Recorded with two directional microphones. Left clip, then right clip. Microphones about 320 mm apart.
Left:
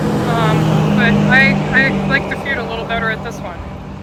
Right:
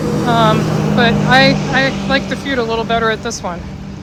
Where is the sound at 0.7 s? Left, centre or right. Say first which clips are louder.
Left 1 dB; left.